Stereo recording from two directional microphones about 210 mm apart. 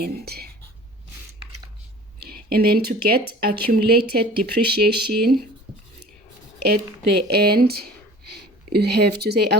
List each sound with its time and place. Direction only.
0.0 s speech: 45° right (ahead or behind)
2.2 s speech: 45° right (ahead or behind)
7.2 s speech: 50° right (ahead or behind)